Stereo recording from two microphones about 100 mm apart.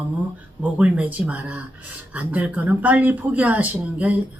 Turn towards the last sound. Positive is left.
turn(degrees=-15)  # may be behind; listen again after turning